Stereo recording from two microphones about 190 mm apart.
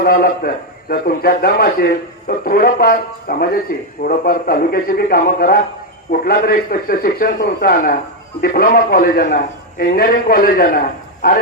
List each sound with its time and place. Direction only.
0.0 s a man's voice: 50° left (ahead or behind)